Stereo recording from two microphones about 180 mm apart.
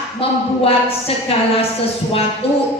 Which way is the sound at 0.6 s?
30° left (ahead or behind).